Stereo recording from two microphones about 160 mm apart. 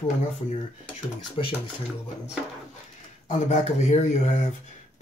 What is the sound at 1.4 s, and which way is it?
Speech, 35° left (ahead or behind).